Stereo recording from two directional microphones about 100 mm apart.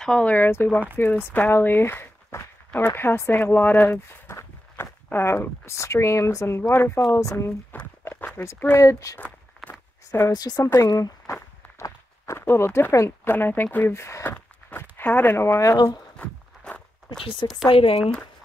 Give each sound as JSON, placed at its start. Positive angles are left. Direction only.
{"t": 0.0, "sound": "speech", "side_deg": 10}
{"t": 7.7, "sound": "walk", "side_deg": 20}
{"t": 8.8, "sound": "speech", "side_deg": 35}
{"t": 10.3, "sound": "speech", "side_deg": 40}
{"t": 15.7, "sound": "speech", "side_deg": 45}
{"t": 16.2, "sound": "walk", "side_deg": 10}
{"t": 17.6, "sound": "speech", "side_deg": 70}